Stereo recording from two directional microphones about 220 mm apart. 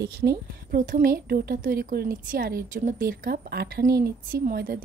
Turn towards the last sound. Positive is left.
turn(degrees=-40)  # may be behind; listen again after turning